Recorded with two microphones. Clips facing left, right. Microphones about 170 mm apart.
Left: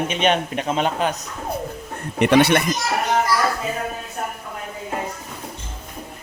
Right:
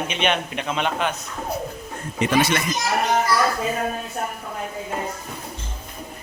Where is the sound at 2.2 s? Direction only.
65° left (ahead or behind).